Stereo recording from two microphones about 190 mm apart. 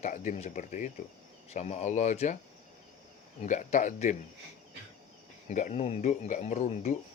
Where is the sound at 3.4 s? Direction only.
40° left (ahead or behind).